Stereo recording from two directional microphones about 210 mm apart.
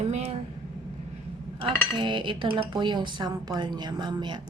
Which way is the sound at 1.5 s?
20° right (ahead or behind).